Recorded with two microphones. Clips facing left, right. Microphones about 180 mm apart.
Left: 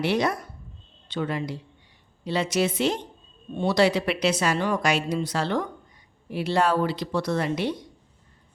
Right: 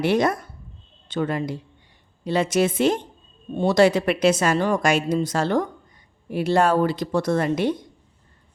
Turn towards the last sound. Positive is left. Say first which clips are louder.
# right 4 dB
turn(degrees=-50)  # may be behind; listen again after turning